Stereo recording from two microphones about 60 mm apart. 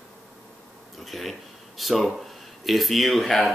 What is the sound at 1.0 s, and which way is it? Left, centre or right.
Speech, centre.